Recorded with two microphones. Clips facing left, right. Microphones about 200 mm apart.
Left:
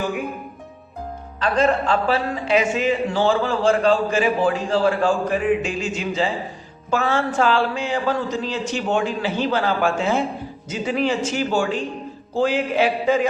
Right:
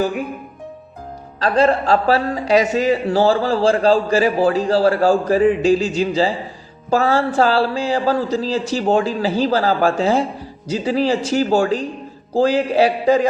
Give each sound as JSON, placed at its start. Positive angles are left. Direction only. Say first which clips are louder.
{"t": 1.4, "sound": "a man's voice", "louder": "right 3 dB", "side_deg": -35}